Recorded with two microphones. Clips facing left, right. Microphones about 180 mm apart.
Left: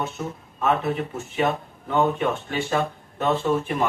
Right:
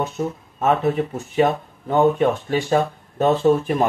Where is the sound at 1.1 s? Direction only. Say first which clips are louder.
Right 5 dB; 40° right (ahead or behind).